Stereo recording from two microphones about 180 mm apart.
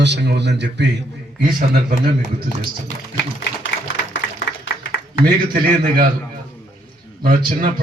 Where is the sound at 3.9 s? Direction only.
85° left.